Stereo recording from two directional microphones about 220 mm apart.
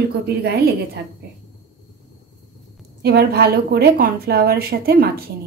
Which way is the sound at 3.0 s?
45° right (ahead or behind).